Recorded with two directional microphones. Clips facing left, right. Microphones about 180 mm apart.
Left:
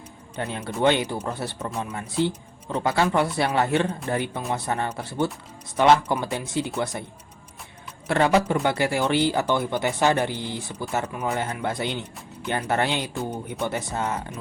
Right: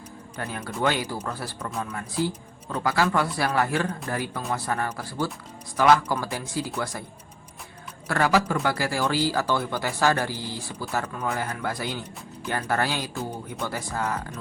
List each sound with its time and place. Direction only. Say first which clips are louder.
0.3 s speech: left 3 dB; 25° left (ahead or behind)
8.0 s speech: left 3 dB; 25° left (ahead or behind)